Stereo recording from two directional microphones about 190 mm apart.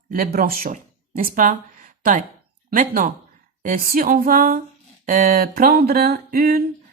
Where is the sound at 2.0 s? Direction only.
45° right (ahead or behind).